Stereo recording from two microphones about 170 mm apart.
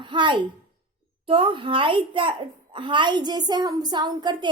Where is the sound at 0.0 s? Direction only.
30° right (ahead or behind).